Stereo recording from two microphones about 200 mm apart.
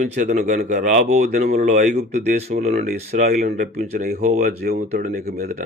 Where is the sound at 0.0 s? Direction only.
35° right (ahead or behind).